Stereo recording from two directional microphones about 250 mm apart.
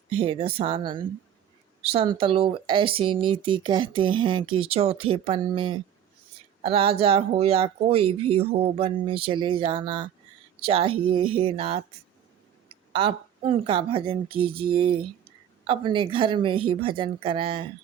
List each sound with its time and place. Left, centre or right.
0.1 s speech: right